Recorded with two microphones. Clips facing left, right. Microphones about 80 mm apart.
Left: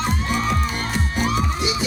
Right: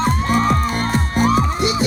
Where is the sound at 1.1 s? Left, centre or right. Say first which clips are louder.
Right 6 dB; right.